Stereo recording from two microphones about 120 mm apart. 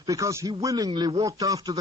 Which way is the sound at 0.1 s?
25° right (ahead or behind).